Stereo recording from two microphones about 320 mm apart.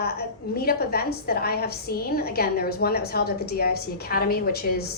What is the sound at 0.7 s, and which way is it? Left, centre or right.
A woman's voice, left.